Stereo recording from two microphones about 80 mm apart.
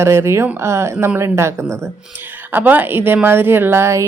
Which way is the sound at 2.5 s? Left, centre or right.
Right.